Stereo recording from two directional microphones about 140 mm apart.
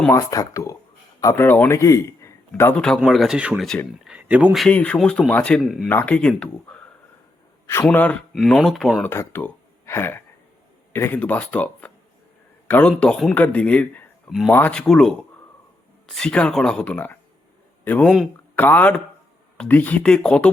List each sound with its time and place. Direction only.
0.1 s a man's voice: 25° left (ahead or behind)
2.5 s speech: 10° left (ahead or behind)
4.0 s a sound: 10° right (ahead or behind)
4.6 s speech: 10° left (ahead or behind)
5.9 s speech: 10° left (ahead or behind)
7.9 s speech: 10° left (ahead or behind)
9.0 s a man's voice: 15° left (ahead or behind)
14.3 s speech: centre (ahead or behind)